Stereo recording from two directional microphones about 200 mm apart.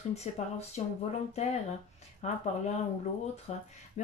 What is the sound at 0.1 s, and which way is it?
Speech, 35° left (ahead or behind).